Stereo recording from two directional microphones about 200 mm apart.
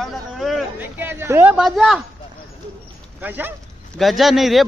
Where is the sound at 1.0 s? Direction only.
10° right (ahead or behind).